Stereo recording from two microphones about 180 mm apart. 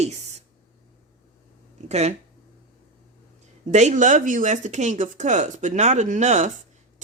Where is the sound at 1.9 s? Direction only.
35° right (ahead or behind).